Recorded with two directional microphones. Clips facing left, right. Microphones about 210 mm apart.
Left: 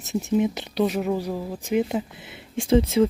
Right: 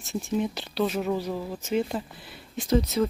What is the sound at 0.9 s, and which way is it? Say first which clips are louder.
Speech: left 2 dB; 5° left (ahead or behind).